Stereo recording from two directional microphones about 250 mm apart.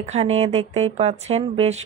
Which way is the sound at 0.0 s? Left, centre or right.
Right.